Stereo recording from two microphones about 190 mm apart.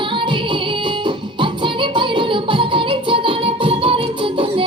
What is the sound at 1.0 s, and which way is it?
Music, 25° right (ahead or behind).